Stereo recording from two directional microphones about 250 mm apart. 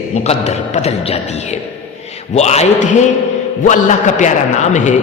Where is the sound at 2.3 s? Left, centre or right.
Left.